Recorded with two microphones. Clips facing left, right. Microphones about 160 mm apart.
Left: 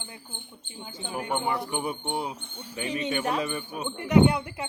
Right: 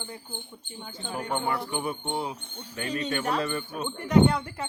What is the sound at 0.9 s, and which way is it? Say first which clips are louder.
Speech: left 1 dB; 15° left (ahead or behind).